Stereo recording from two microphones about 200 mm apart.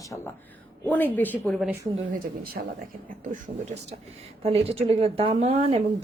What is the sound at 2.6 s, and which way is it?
Speech, 60° right (ahead or behind).